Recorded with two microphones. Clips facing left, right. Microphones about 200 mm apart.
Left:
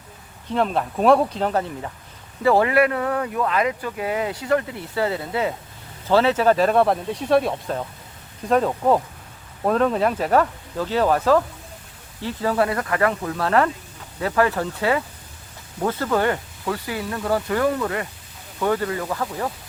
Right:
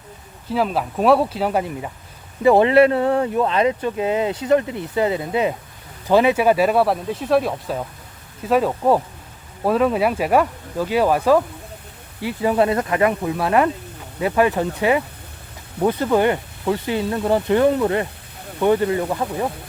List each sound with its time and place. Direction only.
0.5 s speech: 5° right (ahead or behind)